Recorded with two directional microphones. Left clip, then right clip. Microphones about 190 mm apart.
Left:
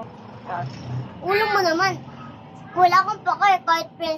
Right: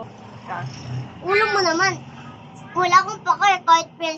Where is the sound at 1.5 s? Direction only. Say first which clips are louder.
Right 1 dB; 20° left (ahead or behind).